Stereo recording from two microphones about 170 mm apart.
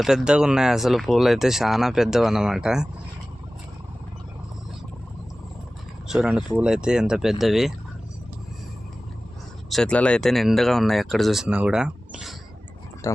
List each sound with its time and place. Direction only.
0.0 s speech: centre (ahead or behind)
6.1 s speech: 5° right (ahead or behind)
9.6 s speech: 5° left (ahead or behind)
13.0 s a sound: 20° left (ahead or behind)